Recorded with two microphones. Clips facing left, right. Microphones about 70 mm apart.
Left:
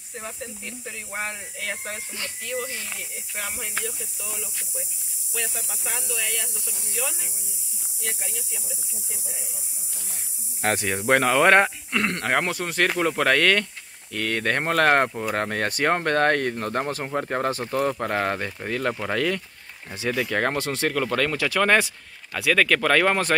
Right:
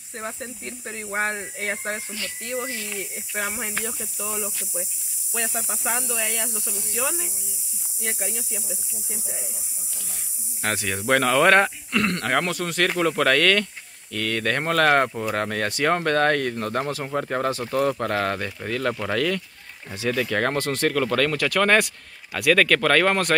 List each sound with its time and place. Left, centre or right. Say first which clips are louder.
0.2 s speech: right 3 dB; right
3.4 s speech: right 3 dB; right
3.8 s speech: right 3 dB; right
10.6 s speech: left 2 dB; left
12.9 s speech: right 1 dB; centre
13.2 s speech: even; centre
17.7 s speech: right 2 dB; centre